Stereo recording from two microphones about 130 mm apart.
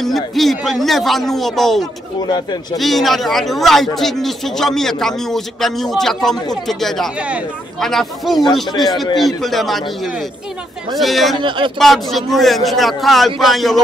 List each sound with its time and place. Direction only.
0.0 s a man's voice: centre (ahead or behind)
2.2 s speech: 35° left (ahead or behind)
2.8 s a man's voice: centre (ahead or behind)
7.2 s speech: 10° right (ahead or behind)
7.8 s a man's voice: centre (ahead or behind)
10.9 s a man's voice: centre (ahead or behind)
11.4 s speech: 40° right (ahead or behind)
11.8 s a man's voice: centre (ahead or behind)